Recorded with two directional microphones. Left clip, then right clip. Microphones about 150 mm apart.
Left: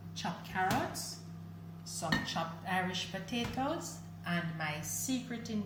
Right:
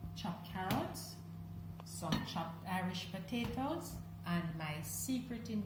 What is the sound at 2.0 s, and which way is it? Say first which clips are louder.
Speech: left 6 dB; 5° right (ahead or behind).